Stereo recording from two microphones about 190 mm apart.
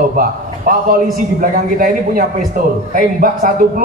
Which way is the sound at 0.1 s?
50° right (ahead or behind).